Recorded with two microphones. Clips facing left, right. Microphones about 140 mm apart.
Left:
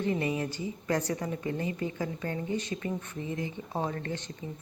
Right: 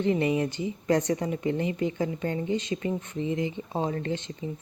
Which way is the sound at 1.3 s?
20° right (ahead or behind).